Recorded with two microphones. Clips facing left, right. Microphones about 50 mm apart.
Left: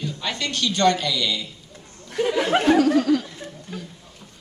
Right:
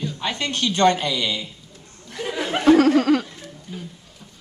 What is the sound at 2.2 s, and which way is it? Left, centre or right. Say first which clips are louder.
Speech: left 5 dB; centre.